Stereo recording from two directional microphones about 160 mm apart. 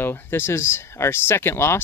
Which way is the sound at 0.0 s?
15° left (ahead or behind).